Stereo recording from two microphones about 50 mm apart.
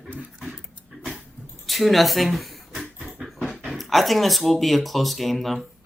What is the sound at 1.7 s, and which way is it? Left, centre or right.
Speech, centre.